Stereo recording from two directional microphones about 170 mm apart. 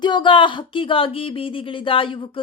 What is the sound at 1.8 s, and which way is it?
Speech, 30° left (ahead or behind).